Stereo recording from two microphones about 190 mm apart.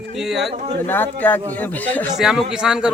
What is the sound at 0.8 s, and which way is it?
Speech, 10° left (ahead or behind).